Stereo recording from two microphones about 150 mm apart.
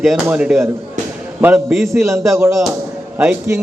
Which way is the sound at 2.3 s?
20° right (ahead or behind).